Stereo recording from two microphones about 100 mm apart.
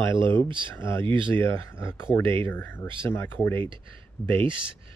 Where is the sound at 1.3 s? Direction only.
25° left (ahead or behind).